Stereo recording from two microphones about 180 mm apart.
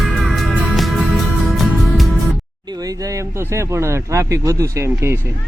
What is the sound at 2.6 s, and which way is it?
Speech, 20° right (ahead or behind).